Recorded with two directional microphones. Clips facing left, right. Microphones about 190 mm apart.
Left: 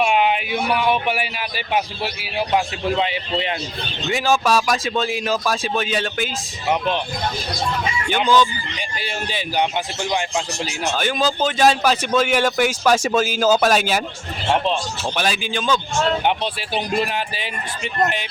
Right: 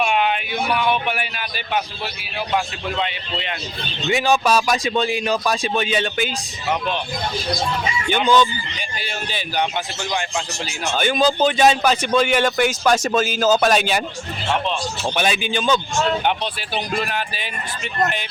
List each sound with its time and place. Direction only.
0.0 s speech: 10° left (ahead or behind)
2.6 s speech: 20° left (ahead or behind)
4.1 s speech: centre (ahead or behind)
8.1 s speech: centre (ahead or behind)
9.0 s speech: 20° left (ahead or behind)
10.9 s speech: centre (ahead or behind)
15.1 s speech: centre (ahead or behind)
17.1 s speech: 25° left (ahead or behind)